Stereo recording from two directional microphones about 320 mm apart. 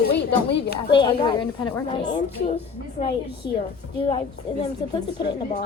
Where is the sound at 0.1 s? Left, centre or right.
Left.